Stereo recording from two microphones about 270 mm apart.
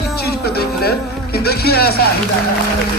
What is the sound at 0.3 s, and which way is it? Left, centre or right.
Music, left.